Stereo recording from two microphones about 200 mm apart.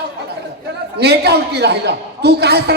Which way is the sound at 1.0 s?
55° right (ahead or behind).